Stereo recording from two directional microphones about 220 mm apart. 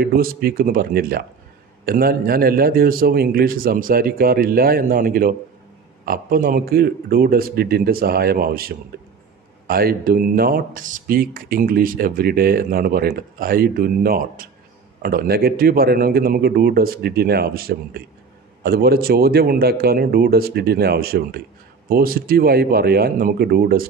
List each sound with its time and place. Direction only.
0.0 s a man's voice: 40° right (ahead or behind)